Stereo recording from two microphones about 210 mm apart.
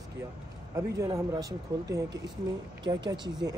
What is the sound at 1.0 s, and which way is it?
A man's voice, 15° right (ahead or behind).